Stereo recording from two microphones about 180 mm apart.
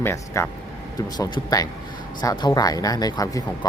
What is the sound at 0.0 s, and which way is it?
Speech, 15° left (ahead or behind).